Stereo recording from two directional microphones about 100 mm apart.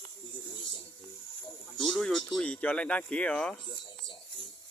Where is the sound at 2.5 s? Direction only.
15° left (ahead or behind).